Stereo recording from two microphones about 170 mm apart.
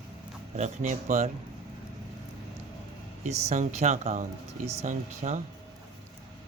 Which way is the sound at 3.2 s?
40° right (ahead or behind).